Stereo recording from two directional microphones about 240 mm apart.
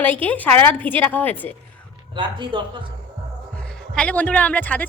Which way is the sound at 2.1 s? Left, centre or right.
Right.